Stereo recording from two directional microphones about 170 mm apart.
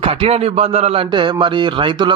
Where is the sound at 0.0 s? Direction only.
35° right (ahead or behind).